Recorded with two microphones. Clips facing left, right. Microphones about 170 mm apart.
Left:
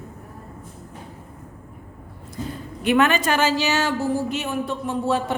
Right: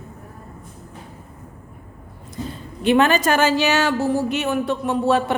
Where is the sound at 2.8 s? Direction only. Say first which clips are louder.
Right 3 dB; 30° right (ahead or behind).